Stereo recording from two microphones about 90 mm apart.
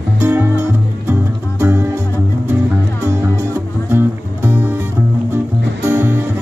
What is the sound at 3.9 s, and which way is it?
Music, 25° right (ahead or behind).